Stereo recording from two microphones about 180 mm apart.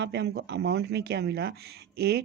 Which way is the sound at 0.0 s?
65° right (ahead or behind).